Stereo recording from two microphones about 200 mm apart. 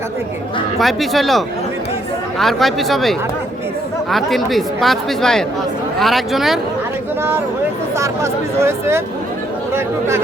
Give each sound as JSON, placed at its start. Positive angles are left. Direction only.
{"t": 0.8, "sound": "speech", "side_deg": 0}
{"t": 7.9, "sound": "speech", "side_deg": -15}